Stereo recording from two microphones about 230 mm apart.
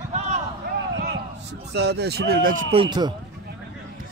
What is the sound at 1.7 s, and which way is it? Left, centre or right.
Speech, right.